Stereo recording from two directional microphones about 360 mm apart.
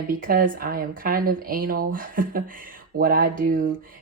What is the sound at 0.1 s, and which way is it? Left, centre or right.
Speech, right.